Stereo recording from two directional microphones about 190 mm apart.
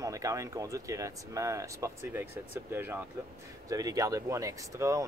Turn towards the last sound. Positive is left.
turn(degrees=-15)  # may be behind; listen again after turning